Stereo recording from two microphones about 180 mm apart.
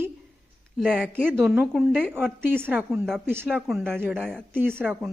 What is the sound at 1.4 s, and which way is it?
A woman's voice, 5° right (ahead or behind).